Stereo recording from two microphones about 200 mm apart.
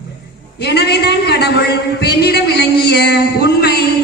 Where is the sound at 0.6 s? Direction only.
55° left (ahead or behind).